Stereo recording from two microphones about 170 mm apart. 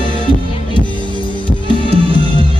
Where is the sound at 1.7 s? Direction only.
25° left (ahead or behind).